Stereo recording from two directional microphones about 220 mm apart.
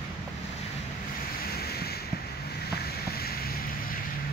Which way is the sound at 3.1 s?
45° left (ahead or behind).